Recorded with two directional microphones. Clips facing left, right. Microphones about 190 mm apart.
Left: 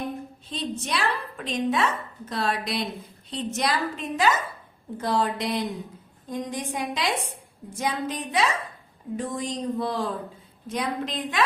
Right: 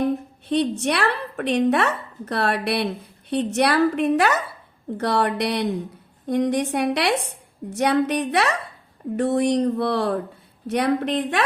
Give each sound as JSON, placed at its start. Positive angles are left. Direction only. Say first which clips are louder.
{"t": 0.4, "sound": "a woman's voice", "louder": "right 11 dB", "side_deg": -65}